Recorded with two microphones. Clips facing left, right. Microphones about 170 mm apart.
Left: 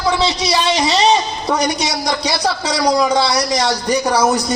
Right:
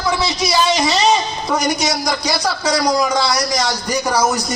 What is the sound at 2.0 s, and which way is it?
Speech, 30° left (ahead or behind).